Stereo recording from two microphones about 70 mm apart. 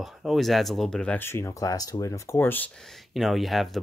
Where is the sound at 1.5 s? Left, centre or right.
Left.